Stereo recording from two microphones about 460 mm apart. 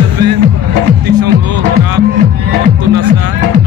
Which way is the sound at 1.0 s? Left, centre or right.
Right.